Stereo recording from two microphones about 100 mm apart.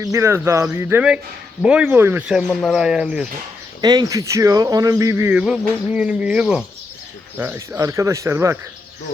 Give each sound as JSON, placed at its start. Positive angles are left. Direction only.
{"t": 0.0, "sound": "speech", "side_deg": -30}
{"t": 1.6, "sound": "speech", "side_deg": -10}
{"t": 2.0, "sound": "speech", "side_deg": -25}
{"t": 2.2, "sound": "speech", "side_deg": -5}
{"t": 3.8, "sound": "speech", "side_deg": -40}
{"t": 5.4, "sound": "speech", "side_deg": -10}
{"t": 7.3, "sound": "speech", "side_deg": -25}